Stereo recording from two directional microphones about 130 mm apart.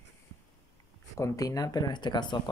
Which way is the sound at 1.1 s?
25° left (ahead or behind).